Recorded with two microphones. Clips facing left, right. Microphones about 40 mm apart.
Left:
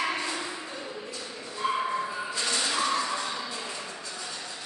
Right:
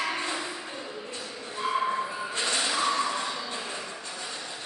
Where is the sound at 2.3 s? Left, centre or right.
Right.